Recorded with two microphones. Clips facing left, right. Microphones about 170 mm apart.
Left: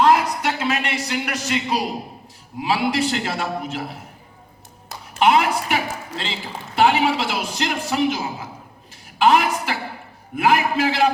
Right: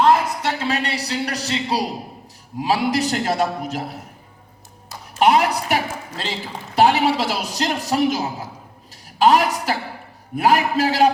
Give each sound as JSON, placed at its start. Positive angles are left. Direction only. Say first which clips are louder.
{"t": 0.0, "sound": "a sound", "louder": "even", "side_deg": -30}
{"t": 2.6, "sound": "a man's voice", "louder": "right 1 dB", "side_deg": -40}
{"t": 5.2, "sound": "a woman's voice", "louder": "right 1 dB", "side_deg": -40}